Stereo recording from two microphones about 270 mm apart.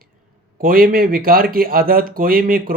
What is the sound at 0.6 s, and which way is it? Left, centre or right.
A man's voice, right.